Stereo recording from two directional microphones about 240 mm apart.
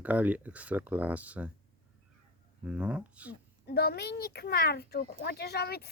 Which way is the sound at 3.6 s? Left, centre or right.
Left.